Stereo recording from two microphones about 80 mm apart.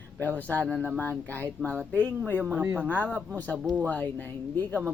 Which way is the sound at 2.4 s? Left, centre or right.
Right.